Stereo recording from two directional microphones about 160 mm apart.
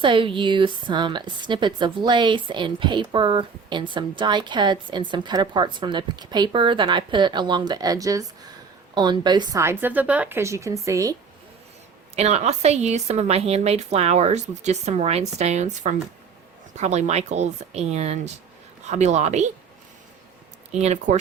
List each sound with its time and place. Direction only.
0.0 s a woman's voice: 30° right (ahead or behind)
12.1 s a woman's voice: 45° right (ahead or behind)
20.7 s a woman's voice: 45° right (ahead or behind)